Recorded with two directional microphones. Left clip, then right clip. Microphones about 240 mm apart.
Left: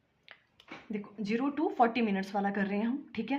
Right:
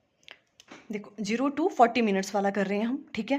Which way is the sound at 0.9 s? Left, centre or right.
Right.